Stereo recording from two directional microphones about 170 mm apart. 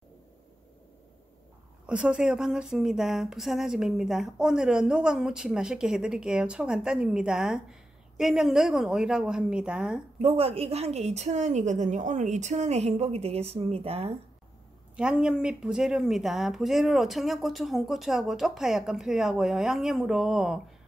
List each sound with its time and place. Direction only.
1.9 s speech: 5° right (ahead or behind)
10.1 s a woman's voice: 35° right (ahead or behind)
15.0 s speech: 5° right (ahead or behind)